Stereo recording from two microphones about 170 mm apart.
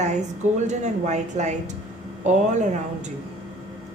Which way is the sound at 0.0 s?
45° right (ahead or behind).